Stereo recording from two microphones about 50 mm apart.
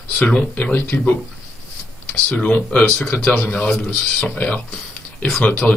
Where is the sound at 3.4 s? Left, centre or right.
Left.